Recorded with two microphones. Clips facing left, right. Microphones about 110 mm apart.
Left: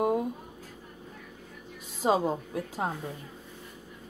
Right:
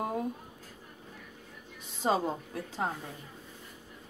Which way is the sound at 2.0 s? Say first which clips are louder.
Left 3 dB; 10° left (ahead or behind).